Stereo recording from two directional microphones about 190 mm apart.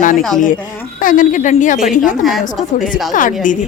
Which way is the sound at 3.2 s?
45° left (ahead or behind).